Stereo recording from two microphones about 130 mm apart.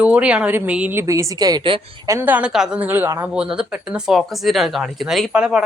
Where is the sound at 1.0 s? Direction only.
25° right (ahead or behind).